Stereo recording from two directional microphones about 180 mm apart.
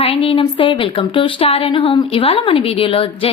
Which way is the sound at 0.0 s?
30° left (ahead or behind).